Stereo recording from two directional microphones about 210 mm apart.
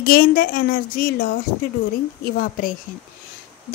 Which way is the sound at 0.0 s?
45° left (ahead or behind).